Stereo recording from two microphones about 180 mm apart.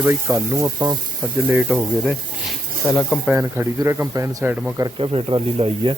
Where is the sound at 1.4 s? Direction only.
5° right (ahead or behind).